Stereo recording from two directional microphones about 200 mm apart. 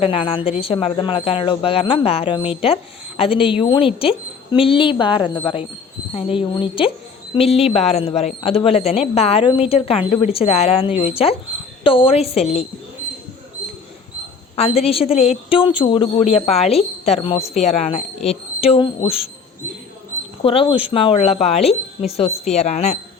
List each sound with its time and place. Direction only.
0.0 s speech: 25° left (ahead or behind)
14.5 s speech: 30° left (ahead or behind)
20.4 s speech: 25° left (ahead or behind)